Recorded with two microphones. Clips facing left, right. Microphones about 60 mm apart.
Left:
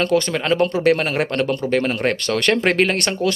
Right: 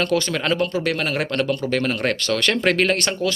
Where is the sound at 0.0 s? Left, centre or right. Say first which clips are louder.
Left 2 dB; left.